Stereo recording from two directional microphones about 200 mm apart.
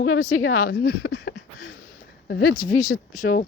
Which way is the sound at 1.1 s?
80° left.